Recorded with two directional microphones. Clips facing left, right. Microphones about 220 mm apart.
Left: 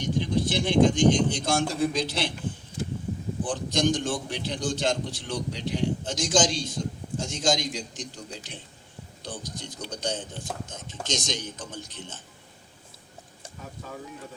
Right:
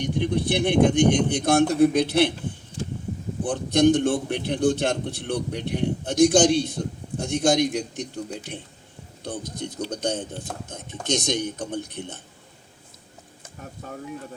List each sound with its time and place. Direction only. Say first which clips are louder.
0.0 s a man's voice: right 2 dB; 60° right (ahead or behind)
3.4 s a man's voice: right 7 dB; 60° right (ahead or behind)